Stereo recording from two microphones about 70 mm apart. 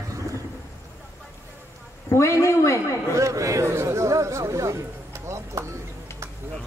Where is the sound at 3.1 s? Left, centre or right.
Right.